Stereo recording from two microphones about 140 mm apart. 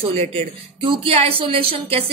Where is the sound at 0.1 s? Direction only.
50° right (ahead or behind).